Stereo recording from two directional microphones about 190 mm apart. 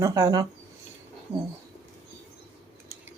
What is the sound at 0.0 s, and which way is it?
Speech, 20° right (ahead or behind).